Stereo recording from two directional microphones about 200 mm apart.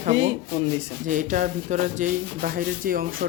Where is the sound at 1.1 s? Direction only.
40° right (ahead or behind).